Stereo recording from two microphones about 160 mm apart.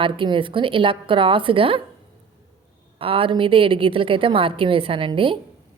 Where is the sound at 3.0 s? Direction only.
35° right (ahead or behind).